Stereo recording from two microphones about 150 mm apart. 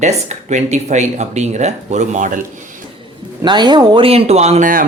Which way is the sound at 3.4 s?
30° right (ahead or behind).